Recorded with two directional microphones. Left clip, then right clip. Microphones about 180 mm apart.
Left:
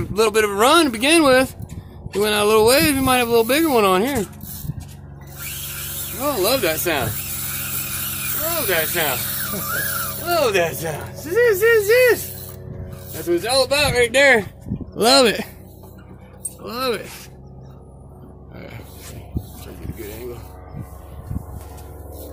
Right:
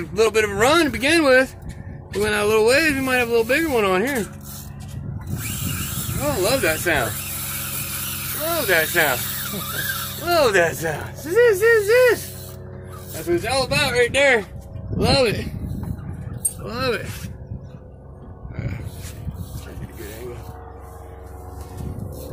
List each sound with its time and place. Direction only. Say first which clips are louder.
0.2 s speech: left 1 dB; 20° left (ahead or behind)
3.9 s speech: left 2 dB; 20° left (ahead or behind)
6.1 s speech: left 1 dB; 20° left (ahead or behind)
8.5 s speech: right 3 dB; centre (ahead or behind)
10.2 s speech: right 2 dB; centre (ahead or behind)
13.3 s speech: left 3 dB; 25° left (ahead or behind)
13.8 s speech: left 1 dB; 35° left (ahead or behind)
15.0 s speech: left 4 dB; 90° left
16.6 s speech: left 1 dB; 15° left (ahead or behind)